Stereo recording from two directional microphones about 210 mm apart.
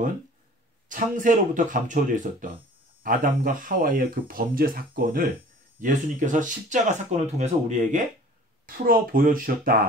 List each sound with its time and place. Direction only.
0.8 s speech: 40° right (ahead or behind)